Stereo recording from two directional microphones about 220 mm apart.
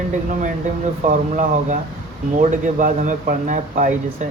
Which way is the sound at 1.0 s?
35° right (ahead or behind).